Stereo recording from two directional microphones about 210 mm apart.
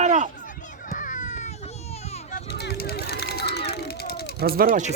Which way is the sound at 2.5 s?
50° left (ahead or behind).